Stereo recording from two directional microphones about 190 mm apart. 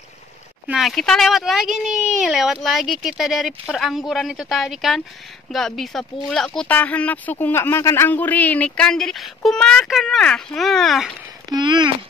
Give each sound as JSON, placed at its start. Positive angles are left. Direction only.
{"t": 0.7, "sound": "speech", "side_deg": 0}
{"t": 11.4, "sound": "speech", "side_deg": -20}